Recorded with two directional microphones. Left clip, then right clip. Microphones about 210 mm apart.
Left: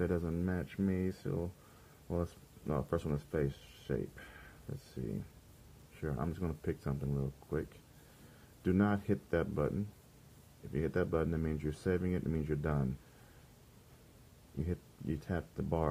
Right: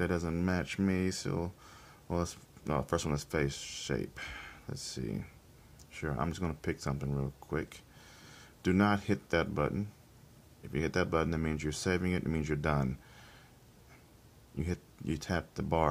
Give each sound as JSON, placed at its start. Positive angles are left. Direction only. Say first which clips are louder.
{"t": 0.0, "sound": "speech", "louder": "right 2 dB", "side_deg": -10}
{"t": 8.6, "sound": "speech", "louder": "right 4 dB", "side_deg": -10}
{"t": 10.7, "sound": "speech", "louder": "right 3 dB", "side_deg": -10}
{"t": 14.6, "sound": "speech", "louder": "right 3 dB", "side_deg": -15}